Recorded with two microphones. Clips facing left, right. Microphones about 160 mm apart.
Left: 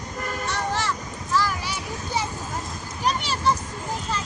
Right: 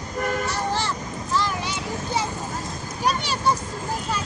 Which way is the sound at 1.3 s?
25° right (ahead or behind).